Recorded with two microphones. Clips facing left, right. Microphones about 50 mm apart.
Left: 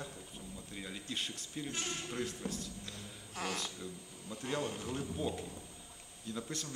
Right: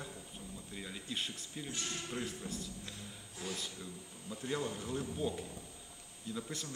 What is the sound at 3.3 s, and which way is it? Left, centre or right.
Speech, left.